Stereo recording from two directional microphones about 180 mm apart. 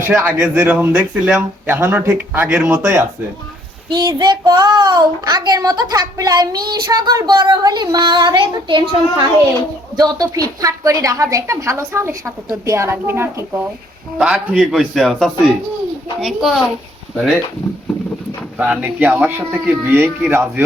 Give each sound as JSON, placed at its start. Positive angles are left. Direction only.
{"t": 0.2, "sound": "a woman's voice", "side_deg": -10}
{"t": 3.8, "sound": "a woman's voice", "side_deg": -25}
{"t": 18.5, "sound": "a woman's voice", "side_deg": -5}